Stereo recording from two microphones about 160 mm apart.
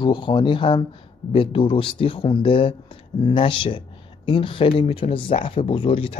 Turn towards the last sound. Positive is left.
turn(degrees=35)  # may be behind; listen again after turning